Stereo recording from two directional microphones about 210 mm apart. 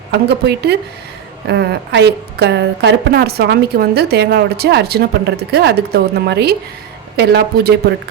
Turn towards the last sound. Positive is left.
turn(degrees=-50)  # may be behind; listen again after turning